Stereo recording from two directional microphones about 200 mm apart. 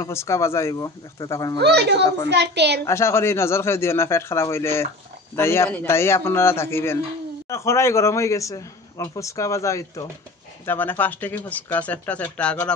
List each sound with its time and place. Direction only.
0.0 s a man's voice: 15° left (ahead or behind)
1.6 s a child's voice: 55° right (ahead or behind)
2.9 s a man's voice: 15° left (ahead or behind)